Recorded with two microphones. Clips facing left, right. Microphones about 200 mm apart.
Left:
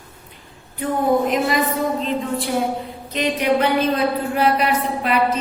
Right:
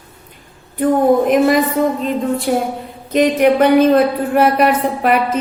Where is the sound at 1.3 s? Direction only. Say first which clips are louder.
Right 7 dB; 50° right (ahead or behind).